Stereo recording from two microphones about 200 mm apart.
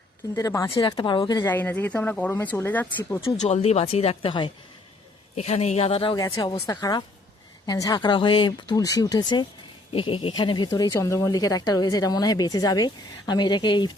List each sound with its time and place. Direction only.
0.3 s speech: 15° left (ahead or behind)
1.5 s speech: 10° left (ahead or behind)
3.2 s speech: 30° left (ahead or behind)